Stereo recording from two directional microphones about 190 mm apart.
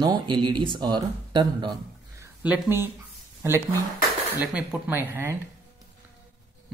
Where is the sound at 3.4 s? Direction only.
15° right (ahead or behind).